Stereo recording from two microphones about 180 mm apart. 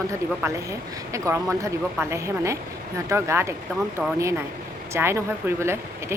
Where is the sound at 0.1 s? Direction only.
15° right (ahead or behind).